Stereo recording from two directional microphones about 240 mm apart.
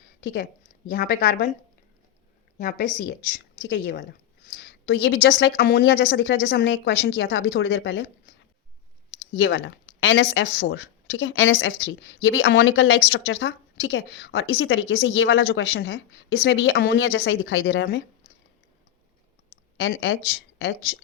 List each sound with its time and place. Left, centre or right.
0.2 s a woman's voice: left
2.6 s a woman's voice: left
9.4 s a woman's voice: left
19.7 s speech: left